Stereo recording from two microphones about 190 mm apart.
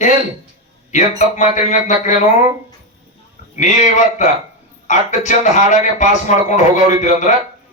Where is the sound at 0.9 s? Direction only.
40° left (ahead or behind).